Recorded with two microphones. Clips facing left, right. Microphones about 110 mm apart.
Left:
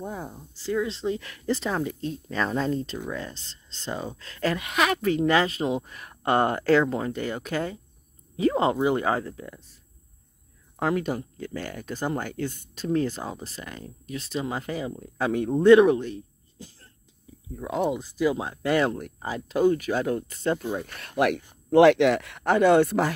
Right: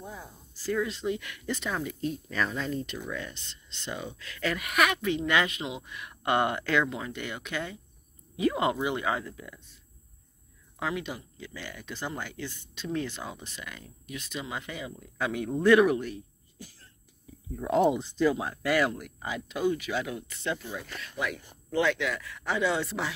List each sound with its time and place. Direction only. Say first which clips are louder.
0.0 s speech: left 8 dB; 55° left (ahead or behind)
0.6 s speech: left 3 dB; 25° left (ahead or behind)
10.8 s speech: left 7 dB; 45° left (ahead or behind); by 16.9 s 25° left (ahead or behind)
17.6 s speech: right 2 dB; 5° left (ahead or behind)
18.3 s speech: left 3 dB; 25° left (ahead or behind); by 20.6 s 45° left (ahead or behind)
20.7 s speech: left 8 dB; 55° left (ahead or behind)